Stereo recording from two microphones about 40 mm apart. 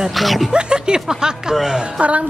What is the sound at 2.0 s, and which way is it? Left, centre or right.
Speech, right.